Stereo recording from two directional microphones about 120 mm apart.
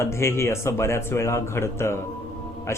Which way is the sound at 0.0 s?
25° left (ahead or behind).